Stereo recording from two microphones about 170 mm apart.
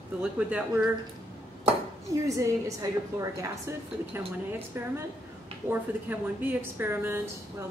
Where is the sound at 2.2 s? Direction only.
20° right (ahead or behind).